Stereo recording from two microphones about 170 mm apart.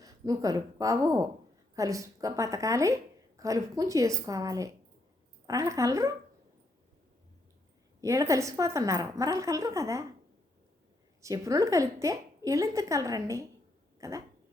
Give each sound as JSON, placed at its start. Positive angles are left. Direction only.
{"t": 0.0, "sound": "a woman's voice", "side_deg": -20}
{"t": 8.0, "sound": "a woman's voice", "side_deg": -20}
{"t": 11.2, "sound": "a woman's voice", "side_deg": -20}
{"t": 14.0, "sound": "a sound", "side_deg": -20}